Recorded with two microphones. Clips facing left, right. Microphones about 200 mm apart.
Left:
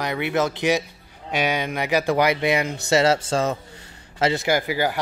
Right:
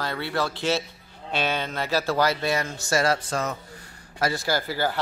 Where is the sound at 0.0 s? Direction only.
20° left (ahead or behind).